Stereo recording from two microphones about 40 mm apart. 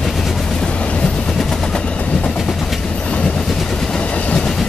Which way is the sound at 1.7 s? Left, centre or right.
Left.